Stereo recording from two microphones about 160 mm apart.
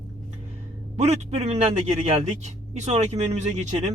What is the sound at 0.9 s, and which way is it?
A man's voice, 45° right (ahead or behind).